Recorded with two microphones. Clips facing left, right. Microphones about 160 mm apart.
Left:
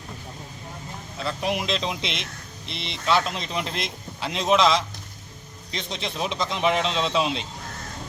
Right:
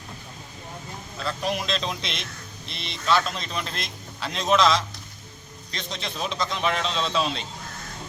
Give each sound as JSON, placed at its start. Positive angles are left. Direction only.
{"t": 1.2, "sound": "a man's voice", "side_deg": 20}